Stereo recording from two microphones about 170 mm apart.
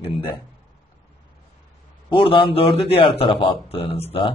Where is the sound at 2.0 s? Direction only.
30° left (ahead or behind).